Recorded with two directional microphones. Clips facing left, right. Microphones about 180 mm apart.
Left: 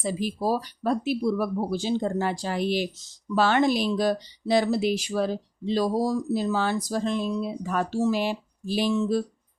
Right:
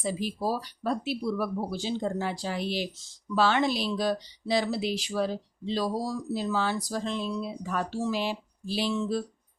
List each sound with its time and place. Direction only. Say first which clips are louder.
0.0 s speech: left 3 dB; 45° left (ahead or behind)